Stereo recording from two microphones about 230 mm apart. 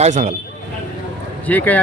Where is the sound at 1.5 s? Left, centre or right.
Centre.